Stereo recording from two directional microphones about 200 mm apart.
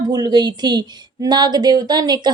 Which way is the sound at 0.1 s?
20° right (ahead or behind).